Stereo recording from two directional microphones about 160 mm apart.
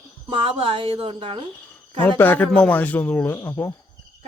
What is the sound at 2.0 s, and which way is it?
Speech, 15° left (ahead or behind).